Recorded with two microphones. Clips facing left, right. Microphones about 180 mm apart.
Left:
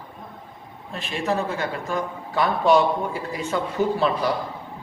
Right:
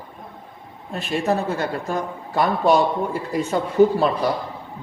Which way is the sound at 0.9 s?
45° right (ahead or behind).